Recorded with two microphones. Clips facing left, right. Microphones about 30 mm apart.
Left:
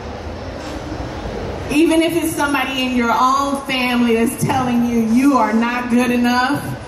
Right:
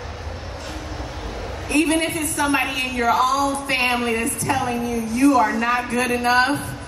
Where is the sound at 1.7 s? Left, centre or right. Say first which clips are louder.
Left 6 dB; left.